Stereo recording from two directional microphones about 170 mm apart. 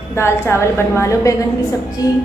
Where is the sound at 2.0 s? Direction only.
20° left (ahead or behind).